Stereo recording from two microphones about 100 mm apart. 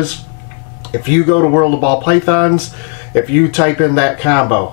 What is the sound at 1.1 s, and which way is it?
Speech, 20° left (ahead or behind).